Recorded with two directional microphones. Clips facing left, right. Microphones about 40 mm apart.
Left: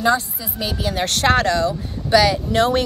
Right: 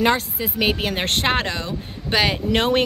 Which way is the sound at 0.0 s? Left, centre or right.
Right.